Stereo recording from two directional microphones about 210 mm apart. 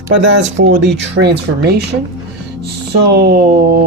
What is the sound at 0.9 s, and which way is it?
Speech, 55° right (ahead or behind).